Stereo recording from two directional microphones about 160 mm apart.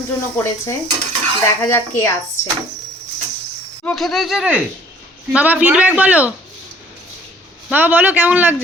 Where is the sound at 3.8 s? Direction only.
Centre (ahead or behind).